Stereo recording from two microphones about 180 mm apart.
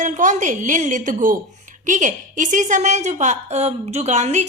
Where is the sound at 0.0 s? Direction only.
45° right (ahead or behind).